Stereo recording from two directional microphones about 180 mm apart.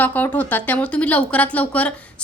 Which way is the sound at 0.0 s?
10° left (ahead or behind).